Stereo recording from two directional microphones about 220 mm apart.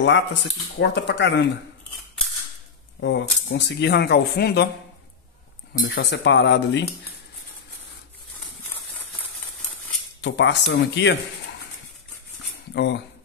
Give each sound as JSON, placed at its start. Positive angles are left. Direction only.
{"t": 0.0, "sound": "speech", "side_deg": 55}
{"t": 3.0, "sound": "speech", "side_deg": 55}
{"t": 5.9, "sound": "speech", "side_deg": 50}
{"t": 10.2, "sound": "speech", "side_deg": 55}
{"t": 12.7, "sound": "speech", "side_deg": 50}